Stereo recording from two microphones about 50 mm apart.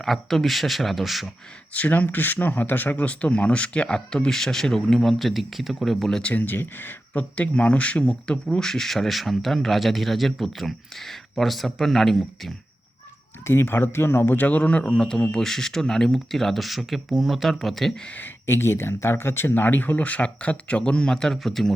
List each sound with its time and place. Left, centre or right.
0.0 s speech: centre
1.7 s speech: left; by 6.1 s centre
6.2 s speech: left
7.2 s speech: left
8.3 s speech: centre
13.4 s speech: left
14.3 s speech: left; by 18.0 s centre
18.2 s speech: left; by 21.8 s centre